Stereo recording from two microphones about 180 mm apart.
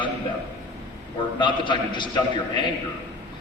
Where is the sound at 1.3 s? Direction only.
25° left (ahead or behind).